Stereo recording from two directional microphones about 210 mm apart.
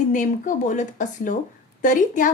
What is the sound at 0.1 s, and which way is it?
A woman's voice, 35° left (ahead or behind).